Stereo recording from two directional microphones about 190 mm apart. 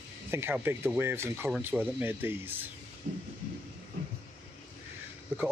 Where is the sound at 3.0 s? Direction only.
45° right (ahead or behind).